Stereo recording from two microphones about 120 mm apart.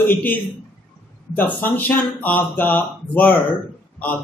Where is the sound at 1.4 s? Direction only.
15° left (ahead or behind).